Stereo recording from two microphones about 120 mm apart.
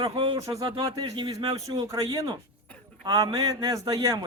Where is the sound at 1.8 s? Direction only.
30° right (ahead or behind).